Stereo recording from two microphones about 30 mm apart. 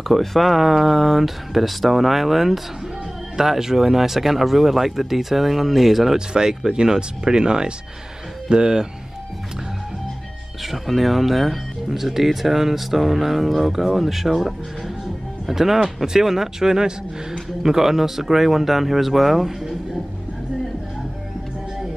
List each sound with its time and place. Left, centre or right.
0.1 s speech: centre
0.6 s a man's voice: centre
6.1 s speech: right
10.6 s a man's voice: centre